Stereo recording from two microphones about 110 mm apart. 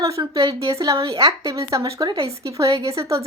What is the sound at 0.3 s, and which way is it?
Speech, 55° right (ahead or behind).